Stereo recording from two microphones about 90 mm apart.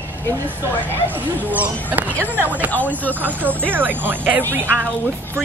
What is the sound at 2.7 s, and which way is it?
Speech, 20° left (ahead or behind).